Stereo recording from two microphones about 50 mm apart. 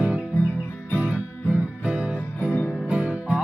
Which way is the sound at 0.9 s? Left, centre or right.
Right.